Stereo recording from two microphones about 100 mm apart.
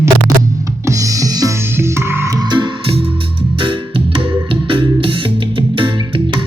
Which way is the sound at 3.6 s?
60° right (ahead or behind).